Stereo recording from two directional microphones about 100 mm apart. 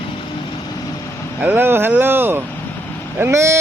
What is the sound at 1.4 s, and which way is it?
Speech, 20° right (ahead or behind).